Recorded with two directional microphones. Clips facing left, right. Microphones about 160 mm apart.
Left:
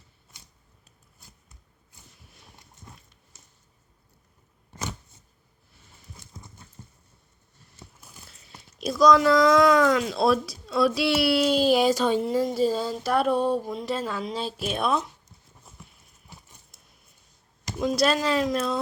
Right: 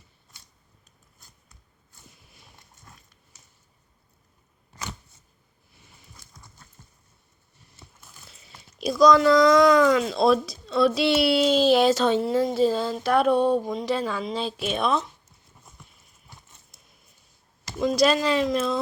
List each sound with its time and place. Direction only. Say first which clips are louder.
6.1 s clip-clop: left 6 dB; 25° left (ahead or behind)
6.8 s a sound: left 7 dB; 20° left (ahead or behind)
8.8 s speech: right 1 dB; centre (ahead or behind)
17.7 s speech: right 2 dB; 5° left (ahead or behind)